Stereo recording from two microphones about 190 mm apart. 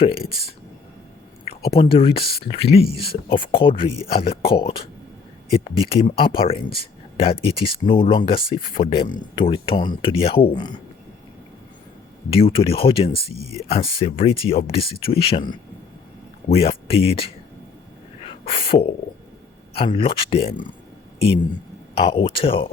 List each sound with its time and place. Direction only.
1.5 s speech: 30° left (ahead or behind)
12.3 s speech: 30° left (ahead or behind)
16.5 s speech: 30° left (ahead or behind)
21.9 s speech: 30° left (ahead or behind)